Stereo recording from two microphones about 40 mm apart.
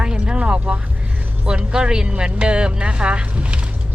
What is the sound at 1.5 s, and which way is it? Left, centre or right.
Speech, right.